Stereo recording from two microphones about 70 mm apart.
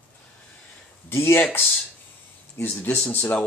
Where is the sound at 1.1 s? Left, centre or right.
Left.